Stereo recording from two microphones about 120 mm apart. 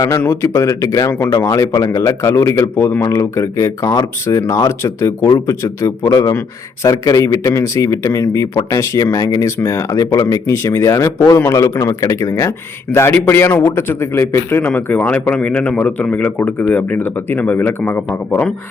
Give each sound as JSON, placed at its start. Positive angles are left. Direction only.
{"t": 0.3, "sound": "a man's voice", "side_deg": 25}